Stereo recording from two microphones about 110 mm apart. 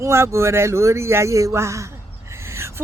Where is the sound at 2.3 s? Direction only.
25° right (ahead or behind).